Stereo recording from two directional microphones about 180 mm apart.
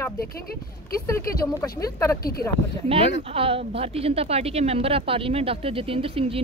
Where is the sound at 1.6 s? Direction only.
15° left (ahead or behind).